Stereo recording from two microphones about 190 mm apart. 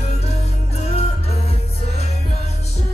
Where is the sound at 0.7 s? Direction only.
35° left (ahead or behind).